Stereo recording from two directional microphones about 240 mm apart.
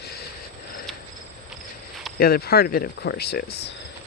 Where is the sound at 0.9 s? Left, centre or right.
Centre.